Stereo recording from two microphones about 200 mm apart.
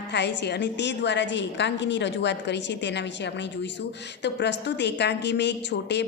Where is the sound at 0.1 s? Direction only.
60° left (ahead or behind).